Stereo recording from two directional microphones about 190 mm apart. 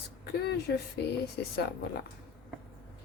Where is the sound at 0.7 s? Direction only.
60° left (ahead or behind).